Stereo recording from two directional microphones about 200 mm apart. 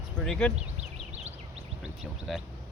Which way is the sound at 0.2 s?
5° left (ahead or behind).